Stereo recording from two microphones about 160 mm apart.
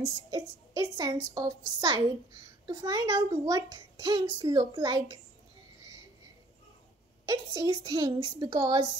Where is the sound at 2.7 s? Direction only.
20° right (ahead or behind).